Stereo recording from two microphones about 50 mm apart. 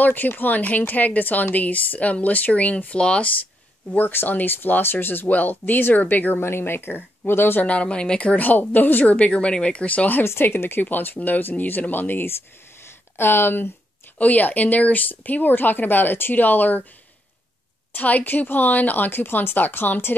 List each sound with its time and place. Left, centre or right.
0.0 s a woman's voice: left
3.9 s a woman's voice: left
6.4 s speech: left
7.6 s speech: left
8.4 s speech: left
10.2 s a woman's voice: left
12.8 s a sound: left
14.1 s a woman's voice: left
17.9 s a woman's voice: left